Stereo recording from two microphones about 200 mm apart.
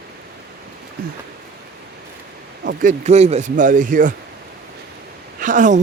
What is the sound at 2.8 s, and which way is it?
Speech, 35° right (ahead or behind).